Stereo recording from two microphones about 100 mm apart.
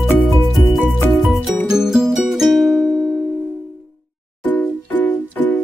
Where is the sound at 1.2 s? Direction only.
5° right (ahead or behind).